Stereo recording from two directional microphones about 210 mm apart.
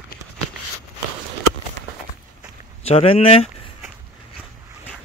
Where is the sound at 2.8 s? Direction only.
30° left (ahead or behind).